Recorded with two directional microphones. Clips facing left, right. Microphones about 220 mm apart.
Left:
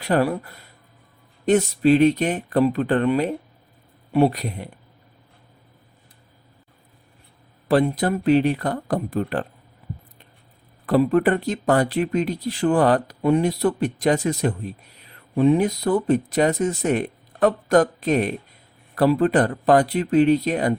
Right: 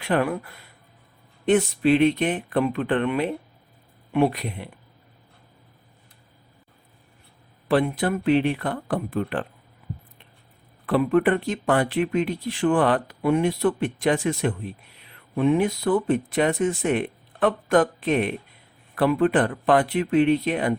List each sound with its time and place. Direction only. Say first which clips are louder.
0.0 s speech: left 3 dB; 35° left (ahead or behind)
7.7 s speech: left 2 dB; 40° left (ahead or behind)
10.8 s speech: left 2 dB; 40° left (ahead or behind)